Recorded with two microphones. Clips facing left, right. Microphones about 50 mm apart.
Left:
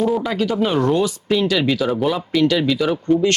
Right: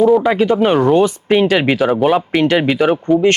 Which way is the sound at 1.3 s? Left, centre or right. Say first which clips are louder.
Right 4 dB; right.